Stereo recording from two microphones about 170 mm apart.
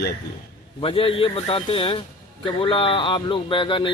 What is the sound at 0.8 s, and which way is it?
A man's voice, 30° left (ahead or behind).